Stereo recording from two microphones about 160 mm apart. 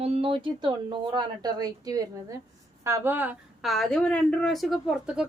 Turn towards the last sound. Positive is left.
turn(degrees=-5)  # may be behind; listen again after turning